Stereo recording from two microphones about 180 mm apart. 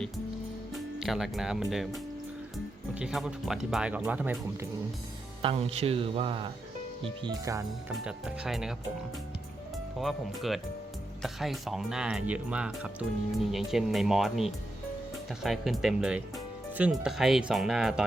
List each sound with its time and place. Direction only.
0.7 s speech: centre (ahead or behind)
2.9 s speech: 5° right (ahead or behind)
5.4 s speech: 30° right (ahead or behind)
8.0 s speech: 5° right (ahead or behind)
10.0 s speech: centre (ahead or behind)